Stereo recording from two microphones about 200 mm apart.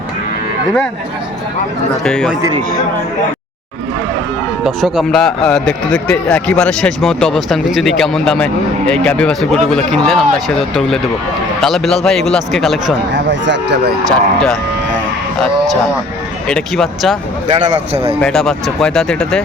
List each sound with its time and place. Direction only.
2.0 s speech: 5° left (ahead or behind)
4.6 s speech: centre (ahead or behind)
13.1 s speech: 65° right (ahead or behind)
14.1 s speech: centre (ahead or behind)
16.5 s speech: centre (ahead or behind)
17.5 s speech: 30° right (ahead or behind)
18.2 s speech: centre (ahead or behind)